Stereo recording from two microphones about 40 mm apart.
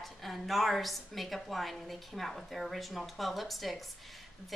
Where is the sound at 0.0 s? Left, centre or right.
Centre.